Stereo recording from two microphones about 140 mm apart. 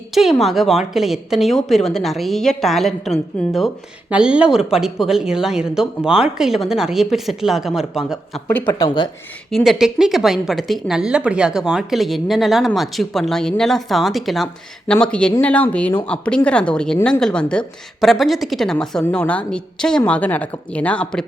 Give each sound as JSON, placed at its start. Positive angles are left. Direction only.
{"t": 0.1, "sound": "a woman's voice", "side_deg": 0}
{"t": 8.6, "sound": "speech", "side_deg": 30}
{"t": 9.5, "sound": "a woman's voice", "side_deg": 0}